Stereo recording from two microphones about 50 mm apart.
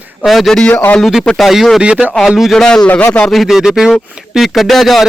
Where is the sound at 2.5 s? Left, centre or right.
Centre.